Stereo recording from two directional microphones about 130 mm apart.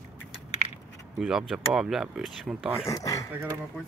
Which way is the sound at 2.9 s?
25° left (ahead or behind).